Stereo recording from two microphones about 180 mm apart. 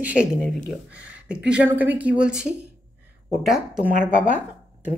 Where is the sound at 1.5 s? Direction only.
10° right (ahead or behind).